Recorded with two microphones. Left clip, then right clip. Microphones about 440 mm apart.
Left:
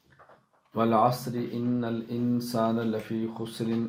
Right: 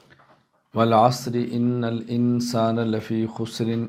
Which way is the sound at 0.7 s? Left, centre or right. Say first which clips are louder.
Right 6 dB; right.